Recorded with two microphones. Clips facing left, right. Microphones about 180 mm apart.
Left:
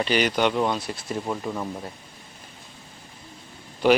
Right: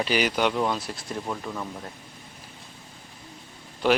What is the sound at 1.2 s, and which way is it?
Speech, 15° left (ahead or behind).